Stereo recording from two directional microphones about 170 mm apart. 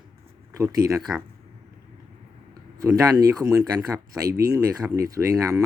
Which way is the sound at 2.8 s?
20° right (ahead or behind).